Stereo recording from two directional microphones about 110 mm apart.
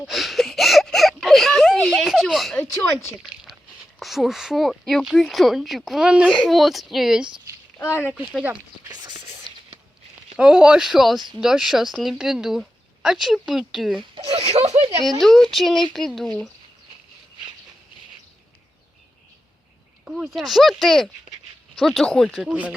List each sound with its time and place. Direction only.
0.1 s a sound: centre (ahead or behind)
2.7 s speech: 25° left (ahead or behind)
4.0 s speech: centre (ahead or behind)
7.8 s speech: 25° left (ahead or behind)
8.1 s speech: centre (ahead or behind)
8.9 s whispering: 40° right (ahead or behind)
10.3 s speech: 10° right (ahead or behind)
14.2 s speech: 65° right (ahead or behind)
15.2 s speech: centre (ahead or behind)
20.1 s speech: 5° right (ahead or behind)